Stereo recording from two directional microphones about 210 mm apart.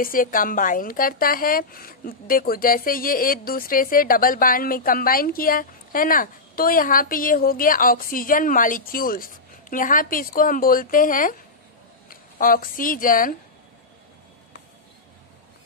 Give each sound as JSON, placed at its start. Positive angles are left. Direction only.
{"t": 0.0, "sound": "speech", "side_deg": 40}